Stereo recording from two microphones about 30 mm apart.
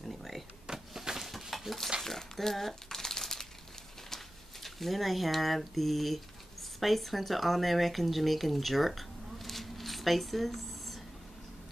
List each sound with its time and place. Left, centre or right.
0.0 s power windows: centre
0.9 s a sound: centre
1.5 s stir: centre
2.0 s a sound: centre
2.9 s crumpling: centre
4.6 s speech: centre